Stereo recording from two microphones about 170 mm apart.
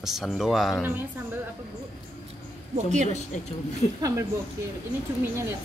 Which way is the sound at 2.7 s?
45° right (ahead or behind).